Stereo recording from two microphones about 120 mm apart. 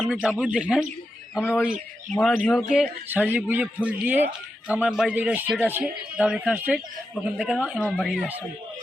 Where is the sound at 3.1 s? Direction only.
15° right (ahead or behind).